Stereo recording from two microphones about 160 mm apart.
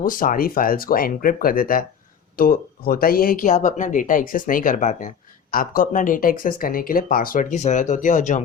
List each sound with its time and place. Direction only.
0.0 s speech: 60° left (ahead or behind)